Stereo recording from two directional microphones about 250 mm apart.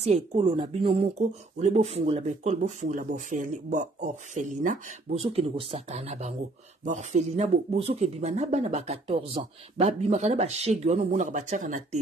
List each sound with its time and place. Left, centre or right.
0.0 s speech: right